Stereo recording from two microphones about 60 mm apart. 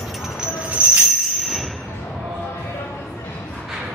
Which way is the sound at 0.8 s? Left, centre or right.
Right.